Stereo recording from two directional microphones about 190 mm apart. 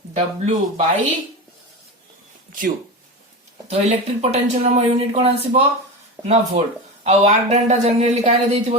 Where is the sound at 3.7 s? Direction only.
35° right (ahead or behind).